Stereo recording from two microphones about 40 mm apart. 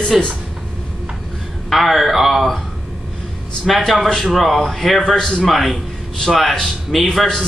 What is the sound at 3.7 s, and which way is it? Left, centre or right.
Speech, centre.